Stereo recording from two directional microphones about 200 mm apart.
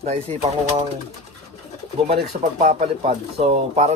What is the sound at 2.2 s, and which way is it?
Speech, 50° right (ahead or behind).